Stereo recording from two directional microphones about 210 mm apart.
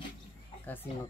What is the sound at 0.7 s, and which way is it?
Speech, 10° left (ahead or behind).